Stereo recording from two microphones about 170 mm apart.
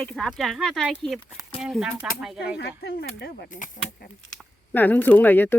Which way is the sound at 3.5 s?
50° left (ahead or behind).